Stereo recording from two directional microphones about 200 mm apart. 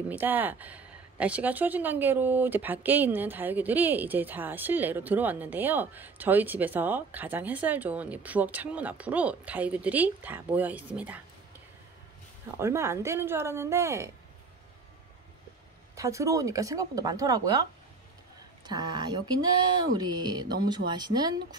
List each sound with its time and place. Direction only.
0.1 s speech: 10° right (ahead or behind)
12.5 s speech: 15° right (ahead or behind)
15.9 s speech: 15° right (ahead or behind)
18.7 s speech: 20° right (ahead or behind)